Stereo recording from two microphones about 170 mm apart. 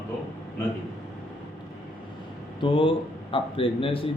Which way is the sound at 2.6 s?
30° left (ahead or behind).